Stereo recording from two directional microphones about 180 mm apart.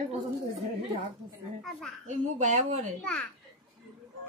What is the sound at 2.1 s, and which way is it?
Speech, 45° right (ahead or behind).